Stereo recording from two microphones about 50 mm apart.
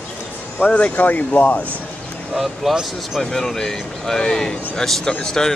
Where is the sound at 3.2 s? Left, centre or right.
Centre.